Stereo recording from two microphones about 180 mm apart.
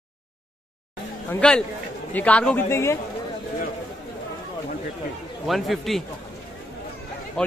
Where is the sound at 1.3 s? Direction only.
5° left (ahead or behind).